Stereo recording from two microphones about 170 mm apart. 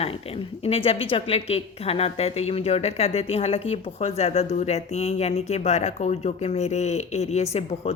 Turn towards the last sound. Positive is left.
turn(degrees=40)  # may be behind; listen again after turning